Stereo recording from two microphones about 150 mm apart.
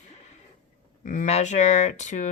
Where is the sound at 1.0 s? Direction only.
60° left (ahead or behind).